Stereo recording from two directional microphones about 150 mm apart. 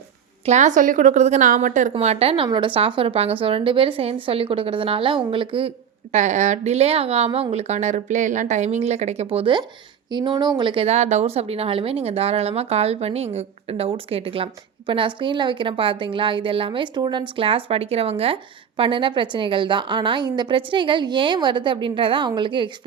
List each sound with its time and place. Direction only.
0.4 s a woman's voice: 50° right (ahead or behind)
1.9 s speech: 45° right (ahead or behind)
6.1 s a woman's voice: 55° right (ahead or behind); by 22.7 s 30° right (ahead or behind)